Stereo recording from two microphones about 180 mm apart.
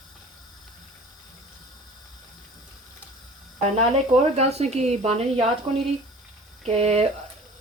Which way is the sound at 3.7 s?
35° right (ahead or behind).